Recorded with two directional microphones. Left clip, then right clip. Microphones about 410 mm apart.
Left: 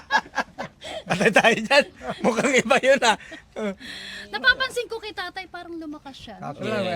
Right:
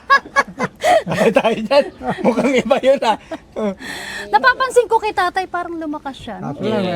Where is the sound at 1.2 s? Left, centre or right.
Left.